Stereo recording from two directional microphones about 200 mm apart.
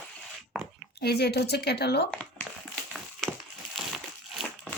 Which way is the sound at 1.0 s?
55° left (ahead or behind).